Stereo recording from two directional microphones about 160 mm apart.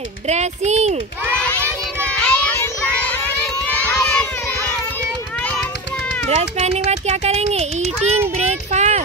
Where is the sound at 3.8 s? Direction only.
10° left (ahead or behind).